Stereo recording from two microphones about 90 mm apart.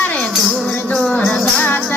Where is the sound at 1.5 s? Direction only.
20° left (ahead or behind).